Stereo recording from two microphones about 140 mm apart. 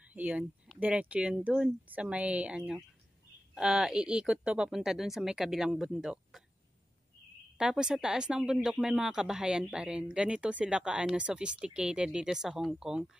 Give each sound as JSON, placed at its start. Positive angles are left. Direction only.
{"t": 0.0, "sound": "speech", "side_deg": -10}
{"t": 7.5, "sound": "speech", "side_deg": -5}